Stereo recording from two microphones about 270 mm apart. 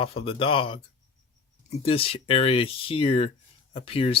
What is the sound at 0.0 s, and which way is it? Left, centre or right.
Speech, left.